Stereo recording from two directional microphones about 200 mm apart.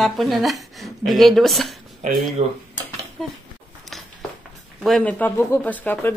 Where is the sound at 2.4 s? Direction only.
35° right (ahead or behind).